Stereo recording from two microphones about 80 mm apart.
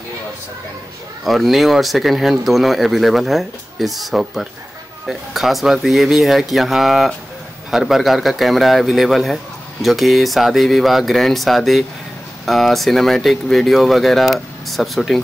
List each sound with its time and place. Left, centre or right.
1.2 s a man's voice: centre